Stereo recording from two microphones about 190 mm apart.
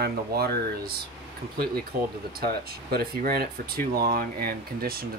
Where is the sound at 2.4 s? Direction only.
55° right (ahead or behind).